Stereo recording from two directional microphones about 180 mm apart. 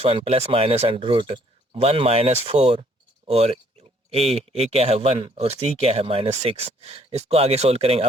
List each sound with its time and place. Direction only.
0.0 s speech: 30° right (ahead or behind)